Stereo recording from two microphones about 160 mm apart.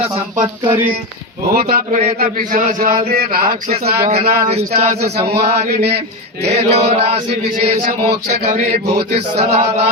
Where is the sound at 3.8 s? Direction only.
80° right.